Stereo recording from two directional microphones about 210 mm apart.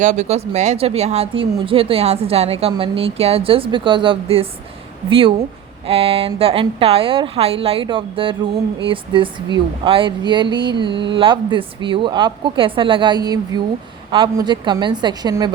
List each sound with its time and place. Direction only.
0.0 s speech: 35° right (ahead or behind); by 15.5 s 20° right (ahead or behind)